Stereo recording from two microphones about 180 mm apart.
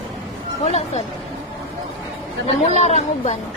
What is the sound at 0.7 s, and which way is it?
Speech, 35° left (ahead or behind).